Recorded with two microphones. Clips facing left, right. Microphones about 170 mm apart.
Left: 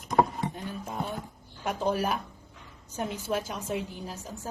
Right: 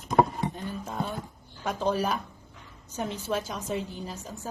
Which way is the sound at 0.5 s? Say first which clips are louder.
Right 1 dB; 10° left (ahead or behind).